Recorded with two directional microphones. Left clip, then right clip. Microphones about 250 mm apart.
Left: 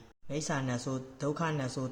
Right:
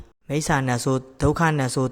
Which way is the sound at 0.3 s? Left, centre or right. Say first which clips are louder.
Right 12 dB; right.